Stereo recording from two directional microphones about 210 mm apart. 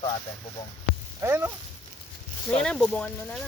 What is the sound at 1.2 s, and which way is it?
Speech, 10° right (ahead or behind).